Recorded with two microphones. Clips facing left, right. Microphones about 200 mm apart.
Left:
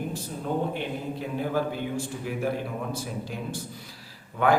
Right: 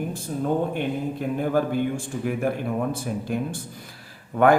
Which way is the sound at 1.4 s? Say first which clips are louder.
Right 5 dB; 50° right (ahead or behind).